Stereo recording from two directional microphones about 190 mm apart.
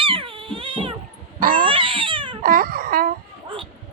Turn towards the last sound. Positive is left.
turn(degrees=-50)  # may be behind; listen again after turning